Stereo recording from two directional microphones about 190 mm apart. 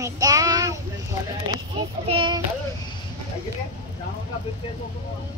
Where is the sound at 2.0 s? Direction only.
25° right (ahead or behind).